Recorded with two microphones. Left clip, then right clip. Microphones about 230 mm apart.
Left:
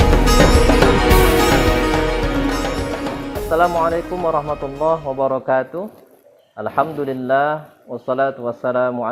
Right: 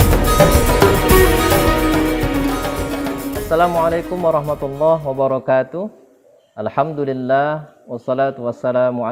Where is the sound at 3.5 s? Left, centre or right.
Right.